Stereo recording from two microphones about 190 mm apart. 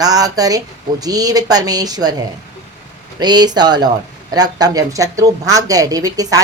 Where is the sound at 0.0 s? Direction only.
20° right (ahead or behind).